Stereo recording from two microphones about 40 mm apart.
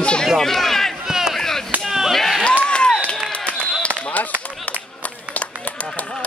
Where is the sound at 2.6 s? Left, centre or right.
Left.